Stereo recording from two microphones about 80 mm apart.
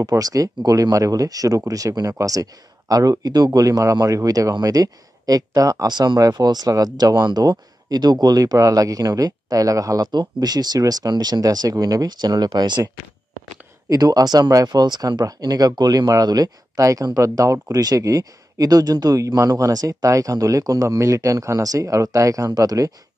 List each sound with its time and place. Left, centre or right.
0.1 s speech: right
5.9 s speech: right
10.1 s speech: right
13.8 s speech: right
15.7 s speech: right